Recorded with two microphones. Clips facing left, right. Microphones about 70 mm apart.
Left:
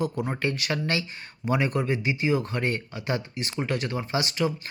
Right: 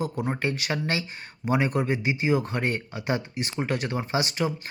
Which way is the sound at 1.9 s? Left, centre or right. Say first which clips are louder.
Right 1 dB; right.